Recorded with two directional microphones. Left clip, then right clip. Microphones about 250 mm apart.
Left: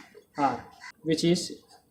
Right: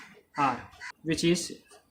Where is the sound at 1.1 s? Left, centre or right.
Centre.